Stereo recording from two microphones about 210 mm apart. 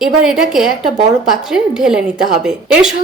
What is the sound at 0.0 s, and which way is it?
A woman's voice, 5° right (ahead or behind).